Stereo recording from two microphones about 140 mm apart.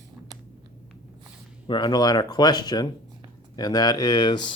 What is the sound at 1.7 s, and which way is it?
Speech, 30° left (ahead or behind).